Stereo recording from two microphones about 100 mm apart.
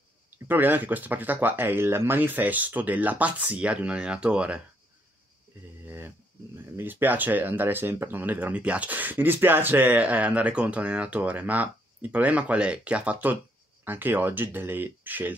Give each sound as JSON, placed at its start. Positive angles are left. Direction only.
{"t": 0.5, "sound": "speech", "side_deg": -20}
{"t": 5.9, "sound": "speech", "side_deg": -20}